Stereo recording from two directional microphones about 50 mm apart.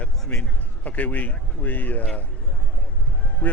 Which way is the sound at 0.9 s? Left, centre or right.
Left.